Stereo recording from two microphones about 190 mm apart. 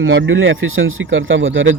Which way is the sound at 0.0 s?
90° right.